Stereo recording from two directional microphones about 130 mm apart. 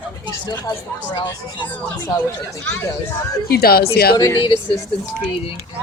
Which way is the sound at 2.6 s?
15° left (ahead or behind).